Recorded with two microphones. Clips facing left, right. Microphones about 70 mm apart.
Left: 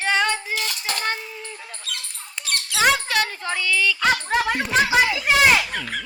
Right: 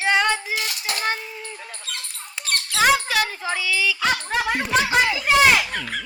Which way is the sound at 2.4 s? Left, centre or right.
Right.